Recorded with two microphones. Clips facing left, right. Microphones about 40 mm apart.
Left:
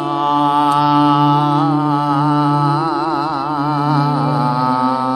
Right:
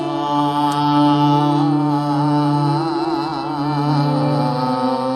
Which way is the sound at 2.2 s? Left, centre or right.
Left.